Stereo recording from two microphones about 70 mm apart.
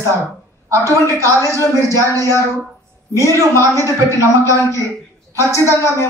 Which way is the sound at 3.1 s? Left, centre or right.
Right.